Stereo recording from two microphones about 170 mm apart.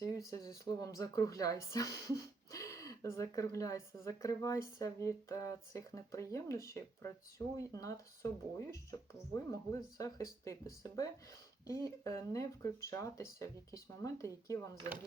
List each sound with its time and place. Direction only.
0.0 s a woman's voice: 20° left (ahead or behind)